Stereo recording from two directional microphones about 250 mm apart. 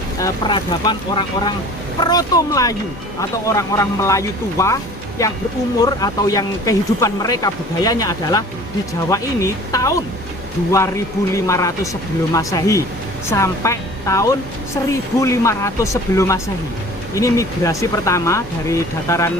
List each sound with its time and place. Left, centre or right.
0.2 s speech: centre